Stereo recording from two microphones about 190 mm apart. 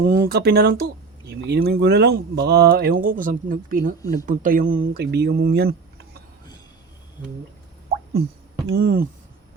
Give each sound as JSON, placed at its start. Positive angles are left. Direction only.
{"t": 0.0, "sound": "speech", "side_deg": -50}
{"t": 7.9, "sound": "a sound", "side_deg": -55}
{"t": 8.7, "sound": "speech", "side_deg": -55}